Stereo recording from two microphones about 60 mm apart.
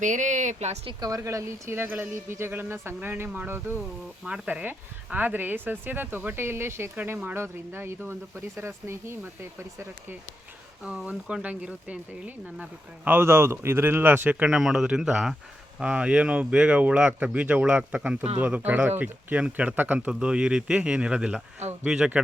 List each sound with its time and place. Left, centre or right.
1.2 s speech: right
10.8 s speech: centre
13.1 s speech: right
14.3 s speech: right
14.5 s speech: centre; by 20.1 s right
20.1 s speech: centre